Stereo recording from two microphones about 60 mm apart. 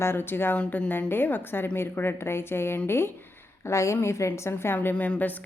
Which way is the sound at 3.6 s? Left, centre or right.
Left.